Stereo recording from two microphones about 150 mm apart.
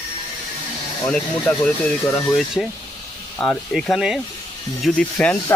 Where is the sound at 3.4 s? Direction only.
5° left (ahead or behind).